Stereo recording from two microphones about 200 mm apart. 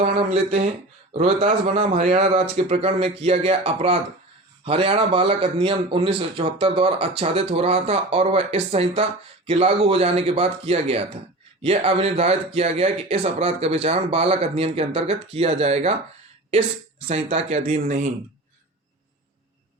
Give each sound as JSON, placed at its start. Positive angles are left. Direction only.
{"t": 0.0, "sound": "a man's voice", "side_deg": -30}
{"t": 17.1, "sound": "a man's voice", "side_deg": -30}